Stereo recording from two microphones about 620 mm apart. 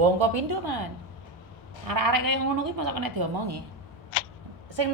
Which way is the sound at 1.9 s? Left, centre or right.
Right.